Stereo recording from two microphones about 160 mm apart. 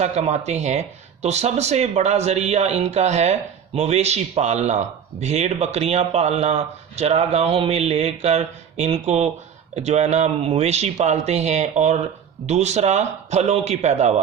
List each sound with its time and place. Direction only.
0.0 s speech: 45° right (ahead or behind)